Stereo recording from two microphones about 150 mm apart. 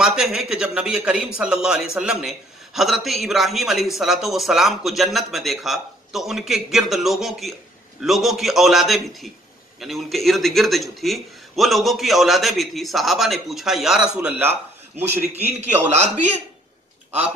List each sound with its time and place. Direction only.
0.0 s a man's voice: 5° right (ahead or behind)